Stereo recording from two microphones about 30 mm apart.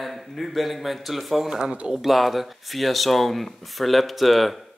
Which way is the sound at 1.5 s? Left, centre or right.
Right.